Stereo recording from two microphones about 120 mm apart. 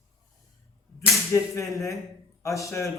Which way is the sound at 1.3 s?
25° left (ahead or behind).